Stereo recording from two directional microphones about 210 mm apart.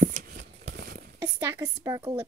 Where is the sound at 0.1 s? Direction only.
45° right (ahead or behind).